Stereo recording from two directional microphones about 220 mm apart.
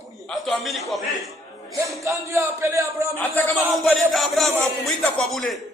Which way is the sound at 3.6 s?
Centre (ahead or behind).